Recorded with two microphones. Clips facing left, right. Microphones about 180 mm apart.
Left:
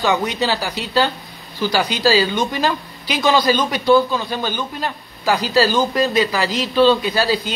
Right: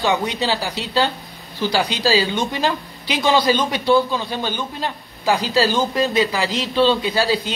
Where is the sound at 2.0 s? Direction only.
25° right (ahead or behind).